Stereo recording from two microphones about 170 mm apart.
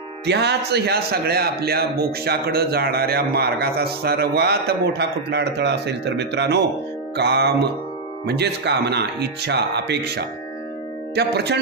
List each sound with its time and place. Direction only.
0.3 s a man's voice: 80° right
7.2 s a man's voice: 75° right (ahead or behind)